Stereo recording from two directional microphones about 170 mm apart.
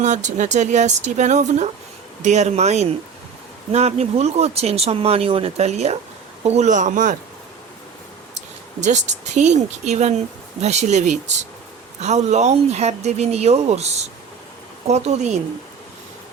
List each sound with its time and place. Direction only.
0.0 s speech: 45° right (ahead or behind)
8.8 s speech: 45° right (ahead or behind)